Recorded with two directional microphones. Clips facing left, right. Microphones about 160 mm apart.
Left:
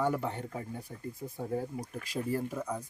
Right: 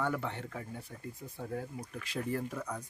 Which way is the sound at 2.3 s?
10° left (ahead or behind).